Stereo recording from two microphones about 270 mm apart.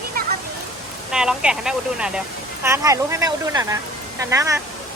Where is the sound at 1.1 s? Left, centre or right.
Centre.